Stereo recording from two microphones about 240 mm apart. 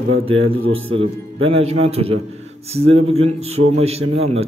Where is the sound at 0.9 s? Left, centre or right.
Right.